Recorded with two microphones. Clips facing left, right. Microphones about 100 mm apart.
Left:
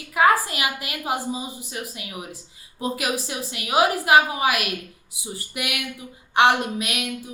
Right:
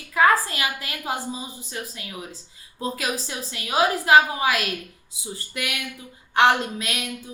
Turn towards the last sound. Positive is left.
turn(degrees=20)  # may be behind; listen again after turning